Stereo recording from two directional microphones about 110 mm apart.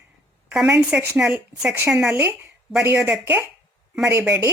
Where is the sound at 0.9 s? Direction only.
15° right (ahead or behind).